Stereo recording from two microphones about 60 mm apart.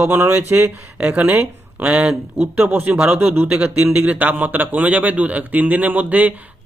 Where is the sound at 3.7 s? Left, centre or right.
Right.